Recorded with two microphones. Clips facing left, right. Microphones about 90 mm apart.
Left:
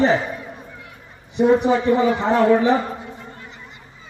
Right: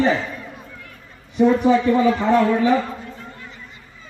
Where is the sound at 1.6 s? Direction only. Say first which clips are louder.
Right 1 dB; 25° left (ahead or behind).